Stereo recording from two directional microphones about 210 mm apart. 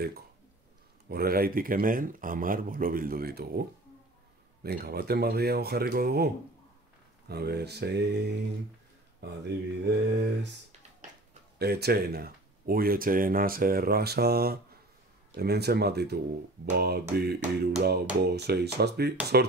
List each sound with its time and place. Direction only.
1.0 s speech: 45° right (ahead or behind)
4.6 s speech: 50° right (ahead or behind)
9.8 s mantra: 55° right (ahead or behind)
11.5 s speech: 50° right (ahead or behind)